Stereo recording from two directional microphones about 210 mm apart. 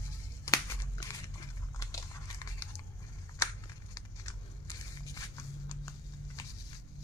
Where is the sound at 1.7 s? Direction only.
15° left (ahead or behind).